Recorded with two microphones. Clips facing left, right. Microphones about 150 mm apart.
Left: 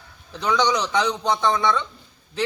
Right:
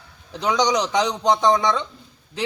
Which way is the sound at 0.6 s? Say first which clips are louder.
Right 2 dB; 40° right (ahead or behind).